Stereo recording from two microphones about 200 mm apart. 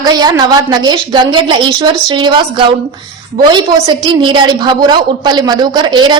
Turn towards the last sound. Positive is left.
turn(degrees=-20)  # may be behind; listen again after turning